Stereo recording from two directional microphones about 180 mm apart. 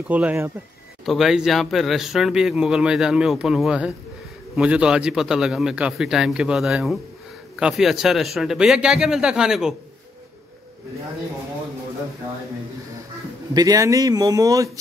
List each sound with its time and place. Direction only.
0.1 s speech: 10° right (ahead or behind)
13.5 s speech: 20° right (ahead or behind)